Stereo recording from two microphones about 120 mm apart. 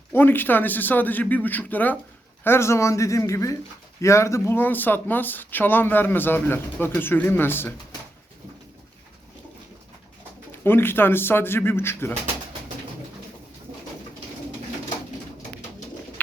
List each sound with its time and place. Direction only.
0.1 s speech: 15° left (ahead or behind)
10.6 s speech: 20° left (ahead or behind)